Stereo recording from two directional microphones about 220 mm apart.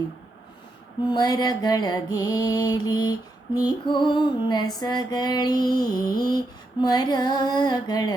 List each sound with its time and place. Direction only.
1.0 s mantra: 20° left (ahead or behind)
4.8 s music: 20° left (ahead or behind)
6.8 s mantra: 20° left (ahead or behind)